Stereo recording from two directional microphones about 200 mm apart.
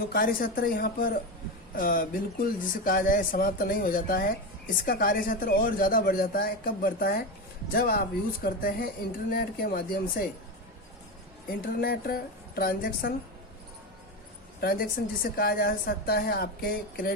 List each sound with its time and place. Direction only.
0.1 s speech: 45° left (ahead or behind)
11.6 s speech: 50° left (ahead or behind)
14.6 s speech: 50° left (ahead or behind)